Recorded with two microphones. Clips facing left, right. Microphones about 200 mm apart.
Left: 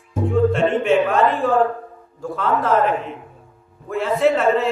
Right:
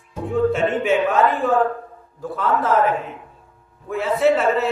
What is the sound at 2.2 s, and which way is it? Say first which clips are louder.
Speech: even; centre (ahead or behind).